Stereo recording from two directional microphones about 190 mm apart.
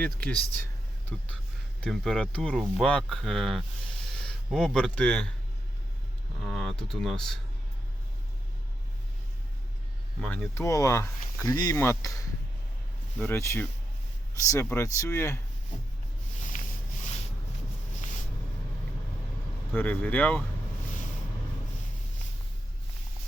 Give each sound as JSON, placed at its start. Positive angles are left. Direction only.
{"t": 0.0, "sound": "speech", "side_deg": 5}
{"t": 6.4, "sound": "speech", "side_deg": 0}
{"t": 10.2, "sound": "speech", "side_deg": 5}
{"t": 13.1, "sound": "speech", "side_deg": 10}
{"t": 16.5, "sound": "a sound", "side_deg": 40}
{"t": 19.7, "sound": "speech", "side_deg": 10}